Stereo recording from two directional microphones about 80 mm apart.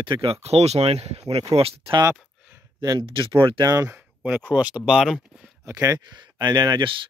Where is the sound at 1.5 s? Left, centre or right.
Right.